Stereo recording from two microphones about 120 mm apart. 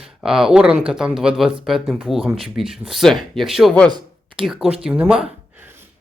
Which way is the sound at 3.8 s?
35° right (ahead or behind).